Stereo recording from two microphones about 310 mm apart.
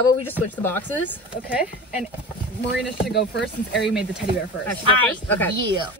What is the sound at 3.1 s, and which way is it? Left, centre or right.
Speech, left.